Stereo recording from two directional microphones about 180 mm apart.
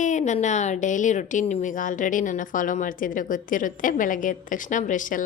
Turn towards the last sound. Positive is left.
turn(degrees=45)  # may be behind; listen again after turning